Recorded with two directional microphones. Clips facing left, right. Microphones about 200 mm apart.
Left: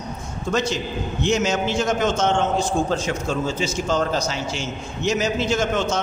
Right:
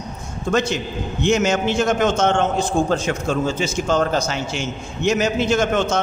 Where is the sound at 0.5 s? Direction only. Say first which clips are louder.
Right 3 dB; 55° right (ahead or behind).